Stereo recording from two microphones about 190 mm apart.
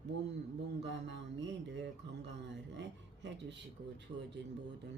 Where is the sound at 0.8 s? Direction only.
65° right (ahead or behind).